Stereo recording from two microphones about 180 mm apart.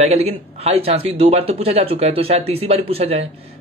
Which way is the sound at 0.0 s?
35° right (ahead or behind).